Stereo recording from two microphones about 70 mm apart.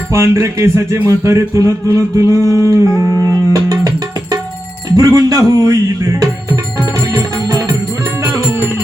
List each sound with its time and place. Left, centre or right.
0.1 s music: right
1.0 s a sound: right
4.9 s speech: right
7.1 s music: right